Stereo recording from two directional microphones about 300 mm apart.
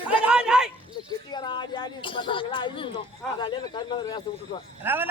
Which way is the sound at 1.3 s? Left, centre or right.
Centre.